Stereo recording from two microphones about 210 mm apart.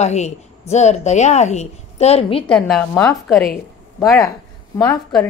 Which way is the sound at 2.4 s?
Centre (ahead or behind).